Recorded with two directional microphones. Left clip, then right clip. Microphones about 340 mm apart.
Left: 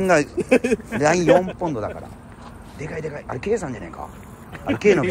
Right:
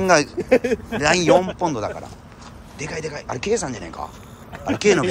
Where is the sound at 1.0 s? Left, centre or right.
Centre.